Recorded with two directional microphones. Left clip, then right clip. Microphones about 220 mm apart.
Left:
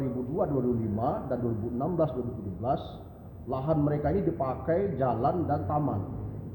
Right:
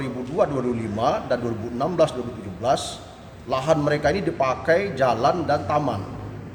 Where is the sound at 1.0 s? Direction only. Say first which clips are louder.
Right 13 dB; 15° right (ahead or behind).